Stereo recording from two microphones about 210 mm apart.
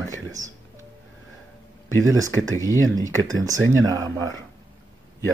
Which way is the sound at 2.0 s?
15° right (ahead or behind).